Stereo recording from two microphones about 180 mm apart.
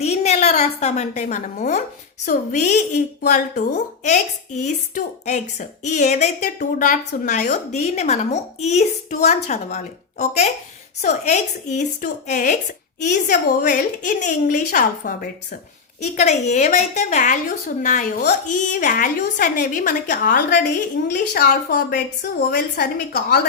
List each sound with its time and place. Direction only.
0.0 s a woman's voice: 40° left (ahead or behind)
13.1 s a woman's voice: 65° left (ahead or behind)
16.0 s a woman's voice: 40° left (ahead or behind)
21.1 s a woman's voice: 65° left (ahead or behind)